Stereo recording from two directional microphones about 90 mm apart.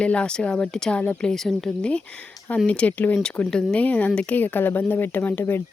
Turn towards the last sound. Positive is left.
turn(degrees=20)  # may be behind; listen again after turning